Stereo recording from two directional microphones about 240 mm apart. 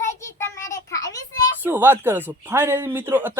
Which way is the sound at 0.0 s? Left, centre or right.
Centre.